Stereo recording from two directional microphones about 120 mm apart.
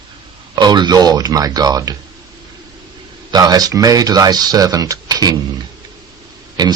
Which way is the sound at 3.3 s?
35° right (ahead or behind).